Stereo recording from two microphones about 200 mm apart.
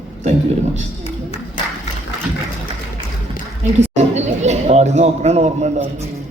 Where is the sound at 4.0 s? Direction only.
35° right (ahead or behind).